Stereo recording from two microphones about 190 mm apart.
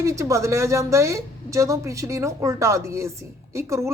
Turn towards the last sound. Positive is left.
turn(degrees=-15)  # may be behind; listen again after turning